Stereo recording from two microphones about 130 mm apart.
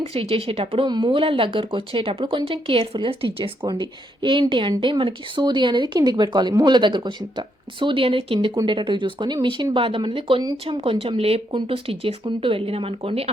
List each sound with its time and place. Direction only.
0.0 s speech: 45° right (ahead or behind)
0.9 s speech: 35° right (ahead or behind)